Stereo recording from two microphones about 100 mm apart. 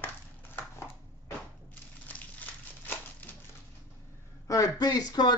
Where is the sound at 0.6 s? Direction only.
25° left (ahead or behind).